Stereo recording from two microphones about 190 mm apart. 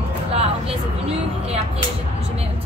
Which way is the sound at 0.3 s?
30° right (ahead or behind).